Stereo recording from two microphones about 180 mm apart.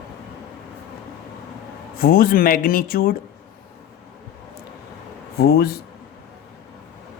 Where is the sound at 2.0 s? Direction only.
55° left (ahead or behind).